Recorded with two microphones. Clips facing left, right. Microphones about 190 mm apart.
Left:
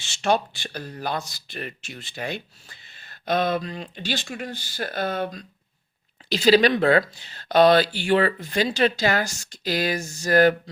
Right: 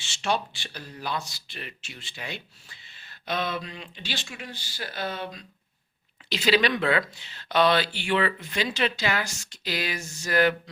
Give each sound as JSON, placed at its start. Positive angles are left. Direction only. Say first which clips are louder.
{"t": 0.0, "sound": "speech", "louder": "left 5 dB", "side_deg": 45}